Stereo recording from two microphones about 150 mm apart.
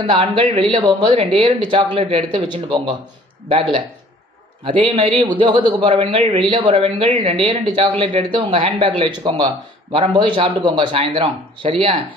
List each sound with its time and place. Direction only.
0.0 s speech: 40° right (ahead or behind)
4.6 s speech: 35° right (ahead or behind)